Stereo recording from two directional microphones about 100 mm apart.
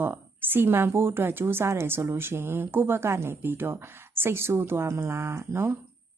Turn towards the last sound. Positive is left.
turn(degrees=-25)  # may be behind; listen again after turning